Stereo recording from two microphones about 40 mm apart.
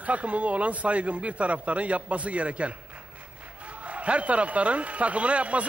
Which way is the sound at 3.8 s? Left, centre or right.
Right.